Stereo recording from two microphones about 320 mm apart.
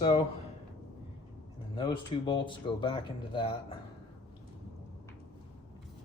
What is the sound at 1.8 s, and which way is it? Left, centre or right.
Speech, centre.